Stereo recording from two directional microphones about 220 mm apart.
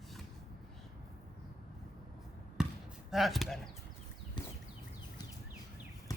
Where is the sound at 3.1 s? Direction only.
Centre (ahead or behind).